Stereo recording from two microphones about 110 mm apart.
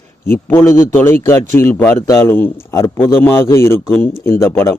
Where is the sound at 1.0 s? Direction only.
20° left (ahead or behind).